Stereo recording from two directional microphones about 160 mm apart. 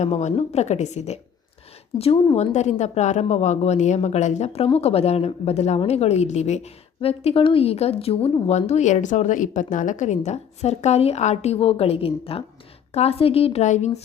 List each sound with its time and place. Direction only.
0.0 s a woman's voice: 45° left (ahead or behind)